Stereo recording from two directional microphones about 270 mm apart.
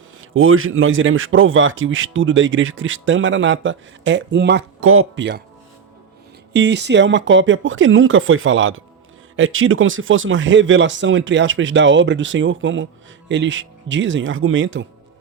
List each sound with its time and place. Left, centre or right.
0.2 s speech: right
6.5 s speech: right